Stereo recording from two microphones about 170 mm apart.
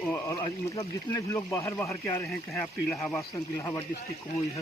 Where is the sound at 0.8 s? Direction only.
15° left (ahead or behind).